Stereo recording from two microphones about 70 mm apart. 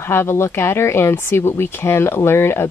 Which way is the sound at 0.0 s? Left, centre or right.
Left.